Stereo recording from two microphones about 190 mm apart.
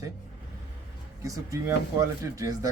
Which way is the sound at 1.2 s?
15° right (ahead or behind).